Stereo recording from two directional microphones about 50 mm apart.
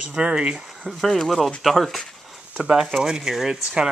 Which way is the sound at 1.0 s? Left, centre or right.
Centre.